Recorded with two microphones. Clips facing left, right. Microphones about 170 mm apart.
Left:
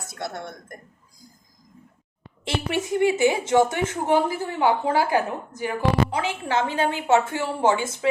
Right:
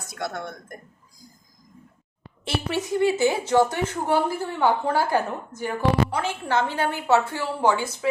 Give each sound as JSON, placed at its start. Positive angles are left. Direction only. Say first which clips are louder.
{"t": 0.1, "sound": "speech", "louder": "right 2 dB", "side_deg": 25}
{"t": 2.6, "sound": "a woman's voice", "louder": "left 1 dB", "side_deg": 20}